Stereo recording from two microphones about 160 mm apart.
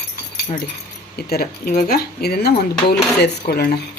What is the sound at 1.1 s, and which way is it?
Speech, 75° left (ahead or behind).